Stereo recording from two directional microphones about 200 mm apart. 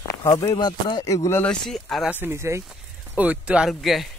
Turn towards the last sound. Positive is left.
turn(degrees=0)  # may be behind; listen again after turning